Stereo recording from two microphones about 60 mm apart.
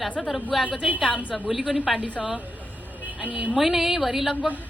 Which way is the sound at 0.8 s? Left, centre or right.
Centre.